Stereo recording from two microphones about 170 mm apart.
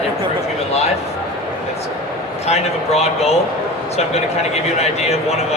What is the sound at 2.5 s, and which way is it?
Speech, 40° left (ahead or behind).